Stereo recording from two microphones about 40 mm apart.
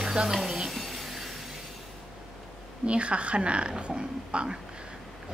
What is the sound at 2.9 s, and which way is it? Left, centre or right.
A woman's voice, right.